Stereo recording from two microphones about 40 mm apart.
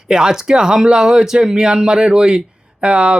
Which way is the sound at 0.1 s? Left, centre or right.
Centre.